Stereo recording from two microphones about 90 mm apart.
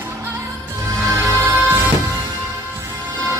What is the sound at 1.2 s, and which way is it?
Music, 30° right (ahead or behind).